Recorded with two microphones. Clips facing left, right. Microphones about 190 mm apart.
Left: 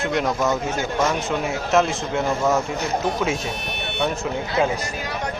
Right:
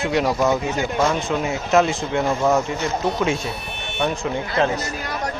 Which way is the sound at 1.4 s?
Centre (ahead or behind).